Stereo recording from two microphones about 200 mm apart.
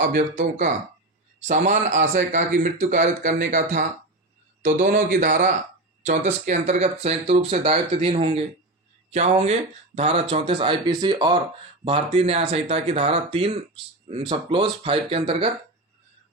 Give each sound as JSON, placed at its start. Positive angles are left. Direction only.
{"t": 1.4, "sound": "speech", "side_deg": -40}